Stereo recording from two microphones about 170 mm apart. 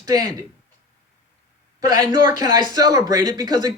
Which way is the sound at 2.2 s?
20° right (ahead or behind).